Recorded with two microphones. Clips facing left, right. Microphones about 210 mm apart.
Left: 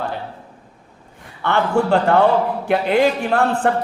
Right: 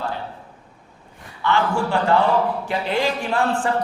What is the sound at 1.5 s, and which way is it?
Speech, 60° left (ahead or behind).